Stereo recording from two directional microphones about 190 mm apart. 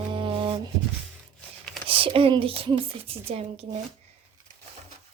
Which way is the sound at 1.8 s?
30° right (ahead or behind).